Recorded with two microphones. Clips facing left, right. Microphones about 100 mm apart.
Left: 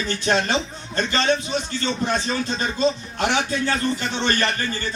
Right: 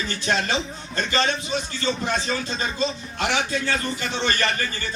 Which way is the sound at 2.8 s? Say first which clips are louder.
Left 6 dB; 35° left (ahead or behind).